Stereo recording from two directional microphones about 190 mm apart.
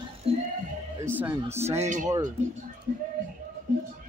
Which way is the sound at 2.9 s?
45° right (ahead or behind).